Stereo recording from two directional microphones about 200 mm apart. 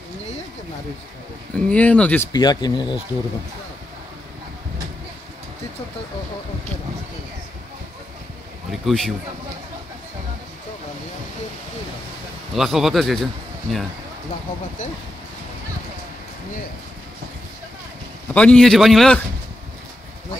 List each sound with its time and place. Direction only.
1.5 s speech: 5° left (ahead or behind)
2.3 s speech: 20° left (ahead or behind)
8.8 s speech: centre (ahead or behind)
12.5 s speech: centre (ahead or behind)
18.3 s speech: 5° left (ahead or behind)